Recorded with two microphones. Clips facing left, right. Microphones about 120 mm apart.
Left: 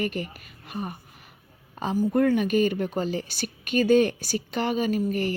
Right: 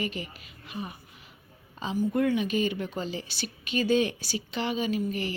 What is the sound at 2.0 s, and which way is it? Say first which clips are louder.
A woman's voice: left 4 dB; 40° left (ahead or behind).